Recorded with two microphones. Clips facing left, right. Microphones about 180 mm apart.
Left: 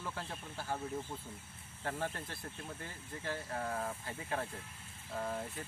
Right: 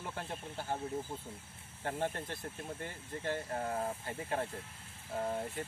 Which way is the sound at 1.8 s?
25° right (ahead or behind).